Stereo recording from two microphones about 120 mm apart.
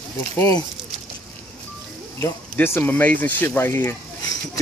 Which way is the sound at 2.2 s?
20° left (ahead or behind).